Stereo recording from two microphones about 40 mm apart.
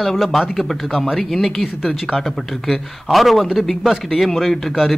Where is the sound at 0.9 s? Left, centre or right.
Centre.